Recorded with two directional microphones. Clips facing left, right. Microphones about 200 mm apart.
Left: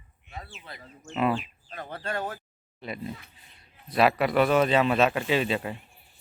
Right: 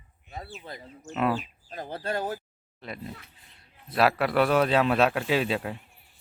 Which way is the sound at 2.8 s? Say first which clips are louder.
Left 3 dB; centre (ahead or behind).